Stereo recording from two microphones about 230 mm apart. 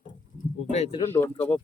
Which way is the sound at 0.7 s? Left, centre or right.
Left.